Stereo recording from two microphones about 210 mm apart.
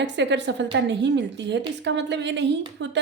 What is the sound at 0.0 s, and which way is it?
A woman's voice, 55° right (ahead or behind).